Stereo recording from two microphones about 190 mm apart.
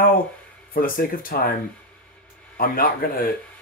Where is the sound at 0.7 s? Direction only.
50° left (ahead or behind).